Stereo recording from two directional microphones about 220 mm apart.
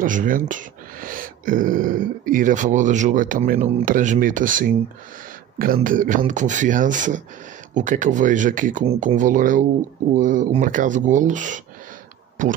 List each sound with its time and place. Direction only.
0.0 s speech: 35° right (ahead or behind)
5.8 s speech: 35° right (ahead or behind)